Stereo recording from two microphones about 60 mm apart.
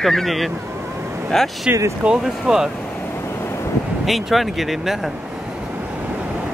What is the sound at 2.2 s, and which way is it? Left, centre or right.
Speech, centre.